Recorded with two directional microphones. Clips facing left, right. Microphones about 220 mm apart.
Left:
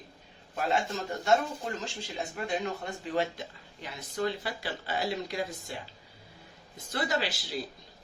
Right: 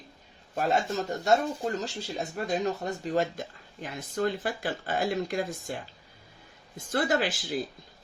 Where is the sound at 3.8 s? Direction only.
50° right (ahead or behind).